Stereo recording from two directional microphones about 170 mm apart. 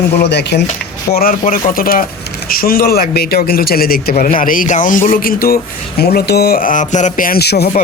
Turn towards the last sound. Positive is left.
turn(degrees=70)  # may be behind; listen again after turning